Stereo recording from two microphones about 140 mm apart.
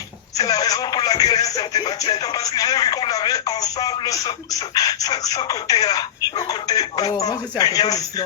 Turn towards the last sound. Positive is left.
turn(degrees=25)  # may be behind; listen again after turning